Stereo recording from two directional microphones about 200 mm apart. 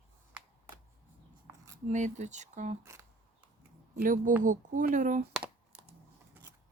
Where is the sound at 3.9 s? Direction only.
45° right (ahead or behind).